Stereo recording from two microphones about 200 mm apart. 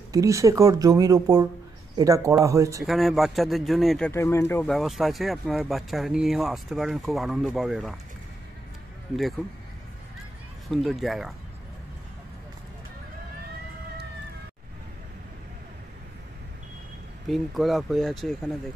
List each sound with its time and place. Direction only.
0.1 s speech: 15° right (ahead or behind)
2.8 s speech: centre (ahead or behind)
4.1 s speech: 15° left (ahead or behind)
9.4 s speech: centre (ahead or behind)
10.7 s speech: centre (ahead or behind)
17.3 s speech: centre (ahead or behind)